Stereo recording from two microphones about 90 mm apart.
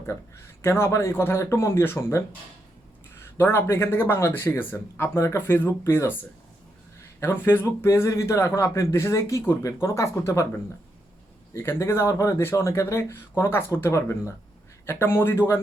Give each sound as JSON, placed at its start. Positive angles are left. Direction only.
{"t": 0.0, "sound": "speech", "side_deg": 30}
{"t": 3.3, "sound": "speech", "side_deg": 30}
{"t": 5.1, "sound": "speech", "side_deg": 35}
{"t": 7.2, "sound": "speech", "side_deg": 25}
{"t": 11.5, "sound": "speech", "side_deg": 30}